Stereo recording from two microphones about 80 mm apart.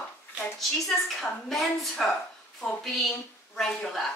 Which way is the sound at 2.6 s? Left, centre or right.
Centre.